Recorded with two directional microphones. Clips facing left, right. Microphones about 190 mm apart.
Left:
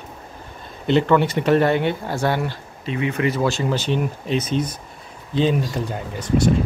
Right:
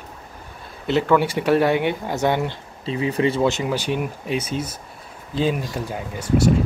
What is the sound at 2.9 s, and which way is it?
Speech, 30° right (ahead or behind).